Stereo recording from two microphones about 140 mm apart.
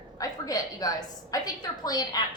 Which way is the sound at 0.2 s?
25° left (ahead or behind).